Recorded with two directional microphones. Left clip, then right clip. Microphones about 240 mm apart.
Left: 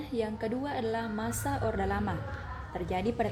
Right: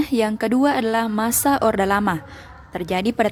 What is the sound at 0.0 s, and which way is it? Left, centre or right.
A woman's voice, right.